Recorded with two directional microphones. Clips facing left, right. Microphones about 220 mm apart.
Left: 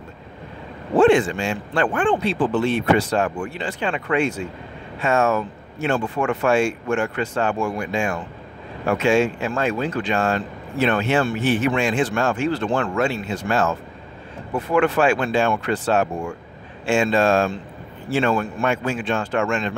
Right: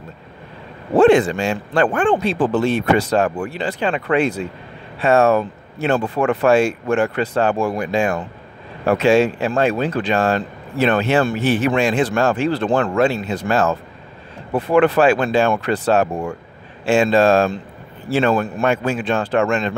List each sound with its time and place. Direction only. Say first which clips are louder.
0.9 s speech: right 3 dB; 40° right (ahead or behind)